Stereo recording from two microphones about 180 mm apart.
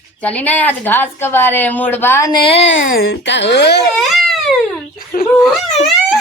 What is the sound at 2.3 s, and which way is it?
Speech, 30° left (ahead or behind).